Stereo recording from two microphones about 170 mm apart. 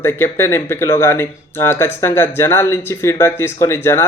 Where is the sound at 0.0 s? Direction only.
15° left (ahead or behind).